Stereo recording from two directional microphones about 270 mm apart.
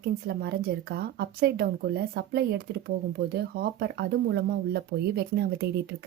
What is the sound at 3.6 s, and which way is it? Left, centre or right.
A woman's voice, right.